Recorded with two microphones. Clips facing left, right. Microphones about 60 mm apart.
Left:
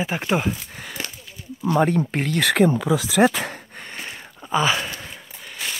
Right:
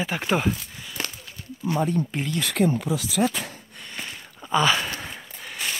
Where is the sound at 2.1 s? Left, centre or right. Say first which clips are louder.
Left 4 dB; left.